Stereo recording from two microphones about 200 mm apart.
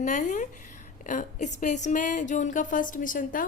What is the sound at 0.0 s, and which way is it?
A woman's voice, 40° left (ahead or behind).